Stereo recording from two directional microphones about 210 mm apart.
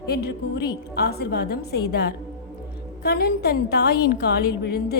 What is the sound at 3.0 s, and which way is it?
A woman's voice, 50° left (ahead or behind).